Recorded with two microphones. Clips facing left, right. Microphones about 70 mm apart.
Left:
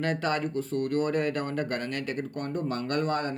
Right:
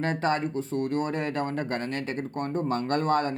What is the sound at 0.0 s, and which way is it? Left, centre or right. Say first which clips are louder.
A man's voice: right 2 dB; right.